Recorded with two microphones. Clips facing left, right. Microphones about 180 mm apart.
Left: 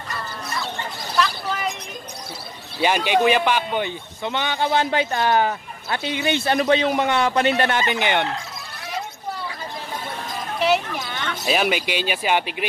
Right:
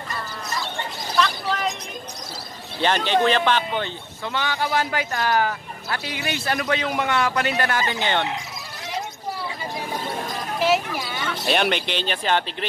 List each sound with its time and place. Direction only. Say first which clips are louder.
1.1 s a sound: even; 5° left (ahead or behind)
2.8 s speech: left 1 dB; 10° left (ahead or behind)
10.6 s speech: left 1 dB; 5° right (ahead or behind); by 12.6 s 10° left (ahead or behind)